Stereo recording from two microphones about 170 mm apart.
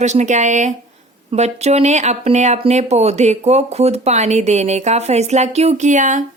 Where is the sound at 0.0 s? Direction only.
45° right (ahead or behind).